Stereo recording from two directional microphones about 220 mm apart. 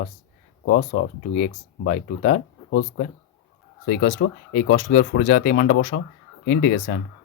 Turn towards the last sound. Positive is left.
turn(degrees=45)  # may be behind; listen again after turning